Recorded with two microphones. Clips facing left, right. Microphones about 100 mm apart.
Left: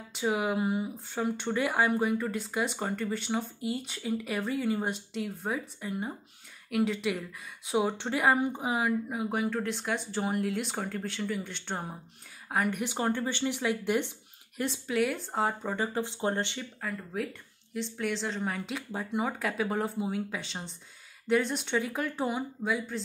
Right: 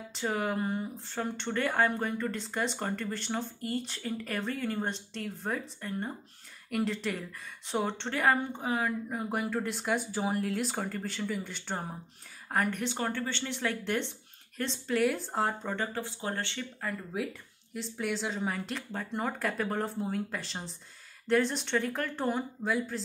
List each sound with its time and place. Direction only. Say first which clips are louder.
0.1 s speech: left 3 dB; 5° left (ahead or behind)
15.7 s speech: left 3 dB; 15° left (ahead or behind)
16.8 s speech: even; centre (ahead or behind)